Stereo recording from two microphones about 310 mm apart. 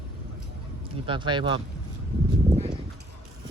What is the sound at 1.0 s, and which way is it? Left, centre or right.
Speech, centre.